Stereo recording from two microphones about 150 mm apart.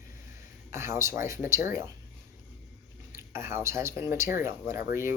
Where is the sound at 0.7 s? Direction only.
20° right (ahead or behind).